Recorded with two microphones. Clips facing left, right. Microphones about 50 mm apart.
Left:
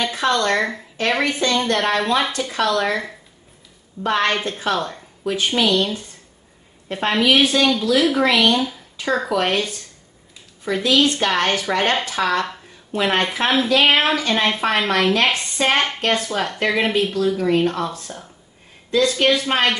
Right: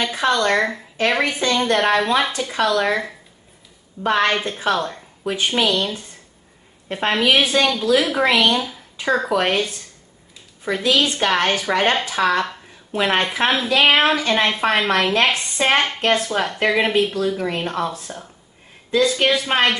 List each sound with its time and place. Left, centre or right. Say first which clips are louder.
0.0 s speech: right 1 dB; centre
6.9 s speech: even; centre